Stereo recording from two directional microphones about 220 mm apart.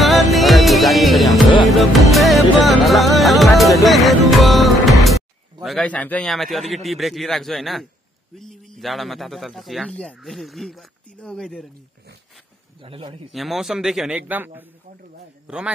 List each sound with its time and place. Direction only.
0.0 s music: centre (ahead or behind)
5.6 s a man's voice: centre (ahead or behind)
12.8 s a man's voice: 25° right (ahead or behind)
13.3 s a man's voice: centre (ahead or behind)